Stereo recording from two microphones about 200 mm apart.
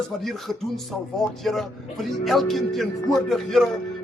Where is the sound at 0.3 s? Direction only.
Centre (ahead or behind).